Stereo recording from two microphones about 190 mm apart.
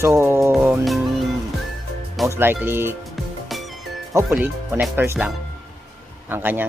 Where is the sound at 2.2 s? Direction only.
15° right (ahead or behind).